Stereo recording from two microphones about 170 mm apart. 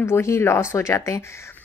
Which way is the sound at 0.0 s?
15° left (ahead or behind).